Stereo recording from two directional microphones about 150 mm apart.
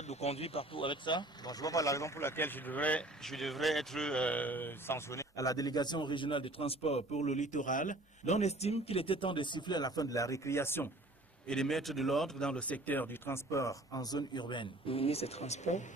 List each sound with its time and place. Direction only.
0.1 s speech: 45° left (ahead or behind); by 10.8 s 15° left (ahead or behind)
11.4 s speech: 5° left (ahead or behind); by 15.8 s 50° left (ahead or behind)